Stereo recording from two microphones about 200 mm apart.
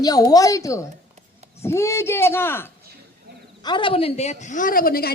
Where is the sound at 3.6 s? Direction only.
25° left (ahead or behind); by 5.1 s 50° left (ahead or behind).